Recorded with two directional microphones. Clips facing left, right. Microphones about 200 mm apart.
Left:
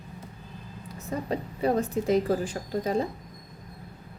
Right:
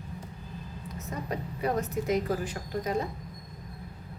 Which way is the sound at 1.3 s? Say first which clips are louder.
Left 4 dB; 30° left (ahead or behind).